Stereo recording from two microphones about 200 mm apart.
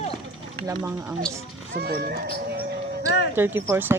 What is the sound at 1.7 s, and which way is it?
Speech, 50° right (ahead or behind).